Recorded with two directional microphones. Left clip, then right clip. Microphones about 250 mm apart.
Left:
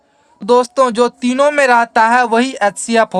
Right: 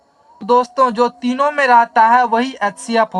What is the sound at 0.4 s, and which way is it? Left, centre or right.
Speech, left.